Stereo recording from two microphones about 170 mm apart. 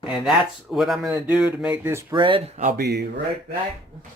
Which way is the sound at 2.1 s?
30° right (ahead or behind).